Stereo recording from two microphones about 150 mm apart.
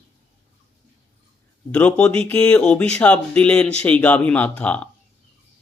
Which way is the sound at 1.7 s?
10° left (ahead or behind).